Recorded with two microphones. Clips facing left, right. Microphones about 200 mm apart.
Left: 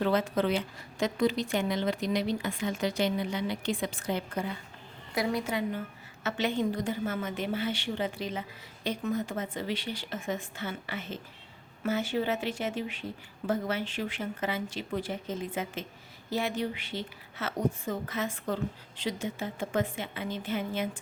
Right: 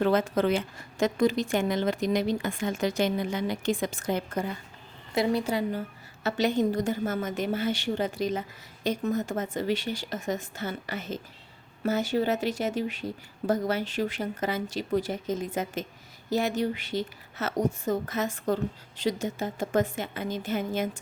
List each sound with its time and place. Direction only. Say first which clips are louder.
0.0 s a woman's voice: right 3 dB; 50° right (ahead or behind)
5.1 s a woman's voice: right 4 dB; 30° right (ahead or behind)